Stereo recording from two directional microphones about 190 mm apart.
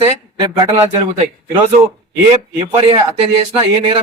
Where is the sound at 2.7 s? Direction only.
25° right (ahead or behind).